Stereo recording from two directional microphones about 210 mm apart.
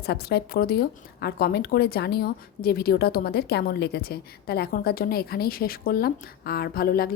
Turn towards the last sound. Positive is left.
turn(degrees=45)  # may be behind; listen again after turning